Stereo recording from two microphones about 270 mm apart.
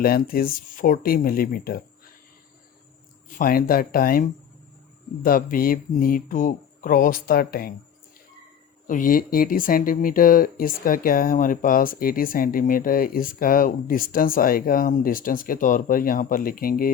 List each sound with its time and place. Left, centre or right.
0.0 s speech: left
3.3 s speech: left
8.9 s speech: left